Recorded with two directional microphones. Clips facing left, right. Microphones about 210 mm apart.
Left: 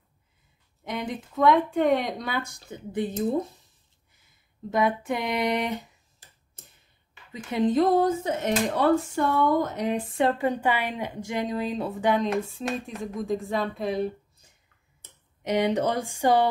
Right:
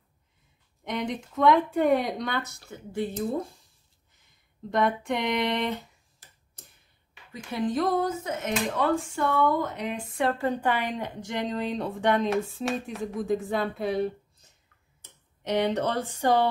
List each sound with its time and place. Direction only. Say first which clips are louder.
0.8 s a woman's voice: right 1 dB; centre (ahead or behind); by 3.6 s 20° left (ahead or behind)
4.6 s speech: left 1 dB; 5° left (ahead or behind)
7.5 s speech: left 5 dB; 25° left (ahead or behind)
8.7 s speech: left 5 dB; 40° left (ahead or behind)
10.1 s a woman's voice: even; 20° left (ahead or behind)